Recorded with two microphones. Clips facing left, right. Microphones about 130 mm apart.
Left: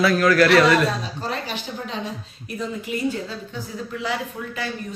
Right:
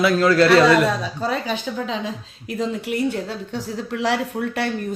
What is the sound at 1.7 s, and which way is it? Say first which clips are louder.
A woman's voice: right 4 dB; 90° right.